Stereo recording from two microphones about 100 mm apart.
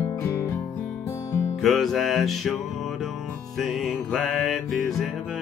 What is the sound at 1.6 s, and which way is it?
Music, centre (ahead or behind).